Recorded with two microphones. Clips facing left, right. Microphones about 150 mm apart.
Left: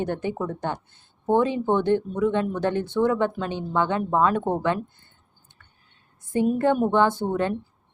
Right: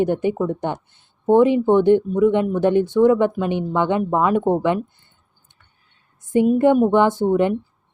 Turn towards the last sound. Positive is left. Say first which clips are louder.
# right 7 dB
turn(degrees=-15)  # may be behind; listen again after turning